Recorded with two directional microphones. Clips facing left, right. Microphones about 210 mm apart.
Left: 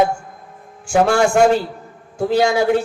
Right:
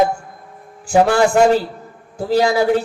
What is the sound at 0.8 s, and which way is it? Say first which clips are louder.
A man's voice: right 1 dB; 35° right (ahead or behind).